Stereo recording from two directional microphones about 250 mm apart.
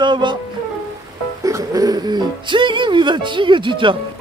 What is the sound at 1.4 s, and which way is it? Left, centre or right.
Speech, centre.